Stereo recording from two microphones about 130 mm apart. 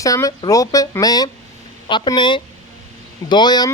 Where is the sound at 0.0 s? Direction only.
25° left (ahead or behind).